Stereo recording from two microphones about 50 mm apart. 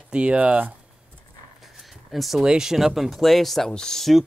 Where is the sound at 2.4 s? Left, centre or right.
Centre.